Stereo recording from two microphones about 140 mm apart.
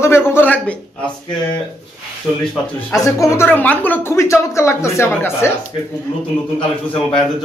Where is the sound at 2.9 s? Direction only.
20° left (ahead or behind).